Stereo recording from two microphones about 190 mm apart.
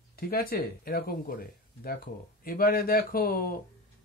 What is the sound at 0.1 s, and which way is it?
Speech, 55° left (ahead or behind).